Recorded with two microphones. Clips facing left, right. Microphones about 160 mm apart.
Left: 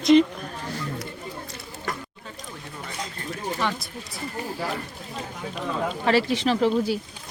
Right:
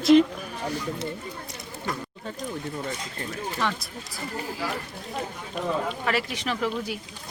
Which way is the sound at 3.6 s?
Centre (ahead or behind).